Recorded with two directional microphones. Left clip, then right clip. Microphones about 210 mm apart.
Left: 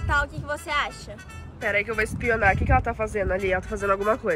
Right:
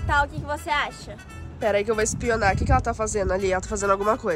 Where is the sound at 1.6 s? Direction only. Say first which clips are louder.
Right 2 dB; 15° right (ahead or behind).